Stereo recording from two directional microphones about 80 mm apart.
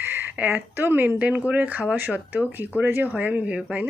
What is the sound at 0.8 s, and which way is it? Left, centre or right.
Speech, right.